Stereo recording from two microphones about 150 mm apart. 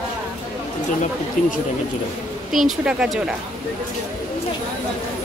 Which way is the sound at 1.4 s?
55° left (ahead or behind).